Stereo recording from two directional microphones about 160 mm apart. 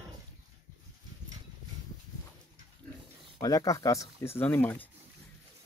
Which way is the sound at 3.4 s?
20° left (ahead or behind).